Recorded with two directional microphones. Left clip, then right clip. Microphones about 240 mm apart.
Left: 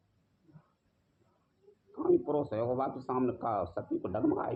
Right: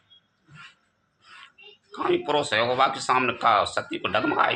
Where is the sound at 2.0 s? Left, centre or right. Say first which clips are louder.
Right 6 dB; right.